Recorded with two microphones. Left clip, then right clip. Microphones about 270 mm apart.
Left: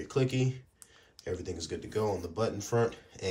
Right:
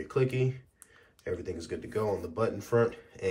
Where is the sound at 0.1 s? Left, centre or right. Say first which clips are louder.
Right 2 dB; centre.